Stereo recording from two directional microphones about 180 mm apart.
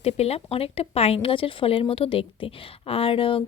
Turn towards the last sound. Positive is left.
turn(degrees=30)  # may be behind; listen again after turning